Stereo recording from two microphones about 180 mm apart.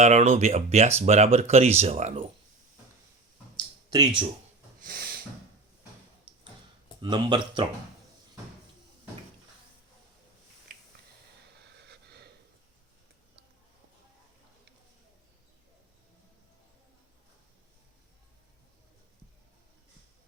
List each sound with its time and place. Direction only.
0.0 s speech: 40° right (ahead or behind)
3.8 s speech: 20° right (ahead or behind)
4.8 s a sound: 55° right (ahead or behind)
7.0 s speech: 25° right (ahead or behind)
10.7 s a sound: 50° right (ahead or behind)
11.9 s gasp: 65° right (ahead or behind)